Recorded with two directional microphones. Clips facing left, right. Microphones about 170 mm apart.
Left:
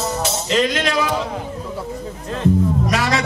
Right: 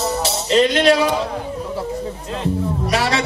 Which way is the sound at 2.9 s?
30° right (ahead or behind).